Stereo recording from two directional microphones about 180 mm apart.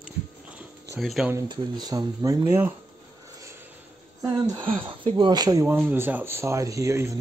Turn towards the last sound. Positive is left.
turn(degrees=-15)  # may be behind; listen again after turning